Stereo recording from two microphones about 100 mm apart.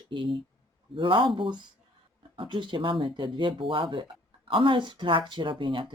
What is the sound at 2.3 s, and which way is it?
Speech, 55° right (ahead or behind).